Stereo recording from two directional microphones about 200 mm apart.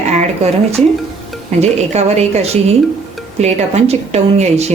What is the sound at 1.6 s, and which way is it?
Speech, 35° right (ahead or behind).